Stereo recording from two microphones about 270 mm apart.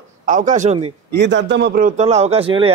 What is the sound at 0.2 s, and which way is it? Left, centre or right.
Speech, right.